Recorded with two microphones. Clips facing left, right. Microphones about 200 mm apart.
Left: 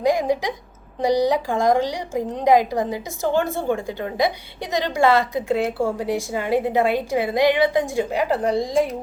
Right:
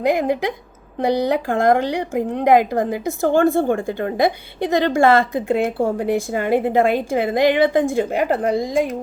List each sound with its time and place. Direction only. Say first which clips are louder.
0.0 s a woman's voice: right 1 dB; 60° right (ahead or behind)